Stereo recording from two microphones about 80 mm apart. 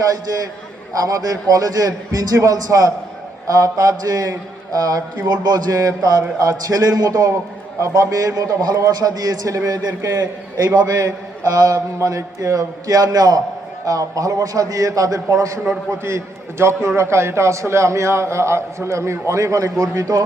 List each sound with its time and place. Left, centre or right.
1.0 s a man's voice: right